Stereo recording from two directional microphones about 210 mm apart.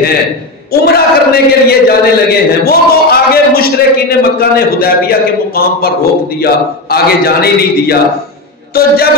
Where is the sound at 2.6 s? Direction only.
45° left (ahead or behind).